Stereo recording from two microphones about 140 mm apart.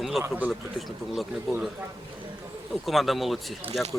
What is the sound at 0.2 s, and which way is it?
Speech, 10° right (ahead or behind).